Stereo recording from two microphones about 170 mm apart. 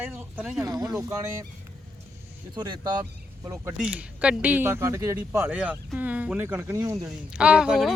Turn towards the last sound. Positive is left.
turn(degrees=0)  # may be behind; listen again after turning